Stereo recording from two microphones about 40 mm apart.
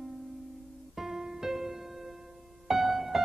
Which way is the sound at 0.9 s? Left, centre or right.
Centre.